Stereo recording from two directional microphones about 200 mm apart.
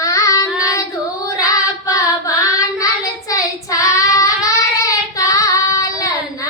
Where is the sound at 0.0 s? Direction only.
15° left (ahead or behind).